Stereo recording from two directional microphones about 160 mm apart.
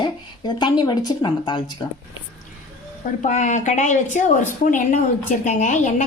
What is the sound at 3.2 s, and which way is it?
Speech, 50° left (ahead or behind).